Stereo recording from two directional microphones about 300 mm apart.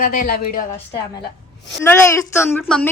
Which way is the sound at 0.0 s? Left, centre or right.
Left.